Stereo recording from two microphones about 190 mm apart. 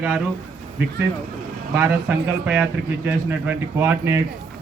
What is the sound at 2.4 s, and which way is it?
Speech, 10° right (ahead or behind).